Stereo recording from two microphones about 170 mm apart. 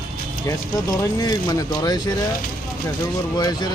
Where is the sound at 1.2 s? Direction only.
25° left (ahead or behind).